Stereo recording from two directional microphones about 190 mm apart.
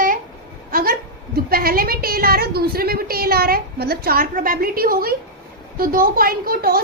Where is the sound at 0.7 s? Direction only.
50° right (ahead or behind).